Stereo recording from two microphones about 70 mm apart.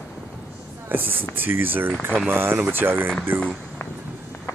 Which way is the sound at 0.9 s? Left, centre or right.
Right.